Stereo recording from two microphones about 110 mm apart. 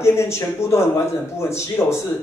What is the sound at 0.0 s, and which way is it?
Speech, 25° left (ahead or behind).